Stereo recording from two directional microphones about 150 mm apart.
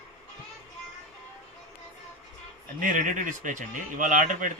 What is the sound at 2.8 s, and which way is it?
A man's voice, 60° right (ahead or behind).